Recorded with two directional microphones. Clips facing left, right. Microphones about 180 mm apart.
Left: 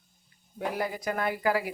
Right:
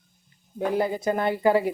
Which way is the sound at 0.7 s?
25° right (ahead or behind).